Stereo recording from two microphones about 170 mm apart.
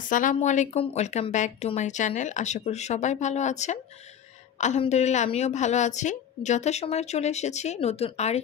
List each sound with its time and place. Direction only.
0.1 s a woman's voice: 50° left (ahead or behind)